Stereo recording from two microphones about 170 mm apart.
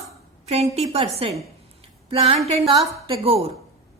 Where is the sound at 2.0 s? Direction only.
35° right (ahead or behind).